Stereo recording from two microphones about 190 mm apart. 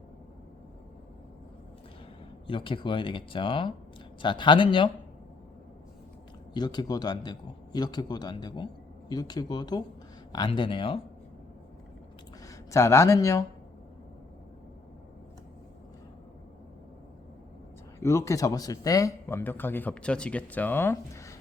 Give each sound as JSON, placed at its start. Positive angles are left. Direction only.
{"t": 2.5, "sound": "a man's voice", "side_deg": 25}
{"t": 6.5, "sound": "a man's voice", "side_deg": 20}
{"t": 12.5, "sound": "speech", "side_deg": 15}
{"t": 18.0, "sound": "speech", "side_deg": 15}